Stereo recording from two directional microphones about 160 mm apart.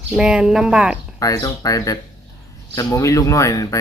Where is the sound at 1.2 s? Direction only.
20° left (ahead or behind).